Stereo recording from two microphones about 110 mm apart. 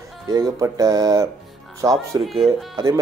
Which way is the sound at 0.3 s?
35° right (ahead or behind).